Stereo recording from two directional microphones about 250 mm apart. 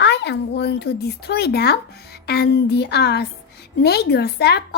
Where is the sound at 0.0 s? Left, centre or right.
Left.